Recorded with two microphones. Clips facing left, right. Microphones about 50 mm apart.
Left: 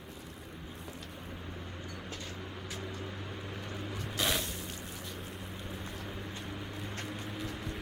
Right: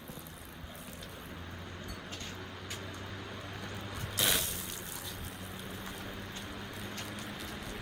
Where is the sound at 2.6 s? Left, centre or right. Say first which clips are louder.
Left 4 dB; centre.